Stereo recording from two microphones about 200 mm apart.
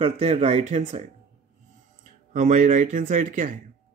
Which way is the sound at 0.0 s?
35° right (ahead or behind).